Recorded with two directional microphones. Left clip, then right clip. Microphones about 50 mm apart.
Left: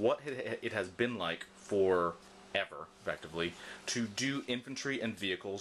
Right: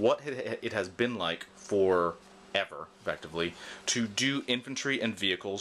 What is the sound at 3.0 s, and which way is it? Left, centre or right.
Speech, right.